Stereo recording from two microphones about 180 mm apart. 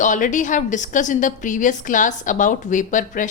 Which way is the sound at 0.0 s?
45° left (ahead or behind).